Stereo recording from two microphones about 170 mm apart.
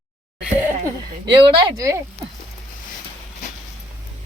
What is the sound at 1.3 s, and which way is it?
Speech, 25° right (ahead or behind).